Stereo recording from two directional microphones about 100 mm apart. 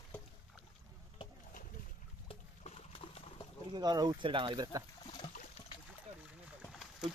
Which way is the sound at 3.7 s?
45° right (ahead or behind).